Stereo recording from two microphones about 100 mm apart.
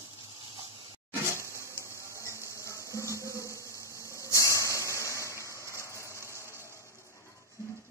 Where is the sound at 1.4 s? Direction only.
30° right (ahead or behind).